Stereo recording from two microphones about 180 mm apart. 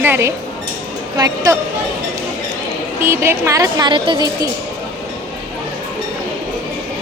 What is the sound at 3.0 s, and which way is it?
A woman's voice, 15° right (ahead or behind).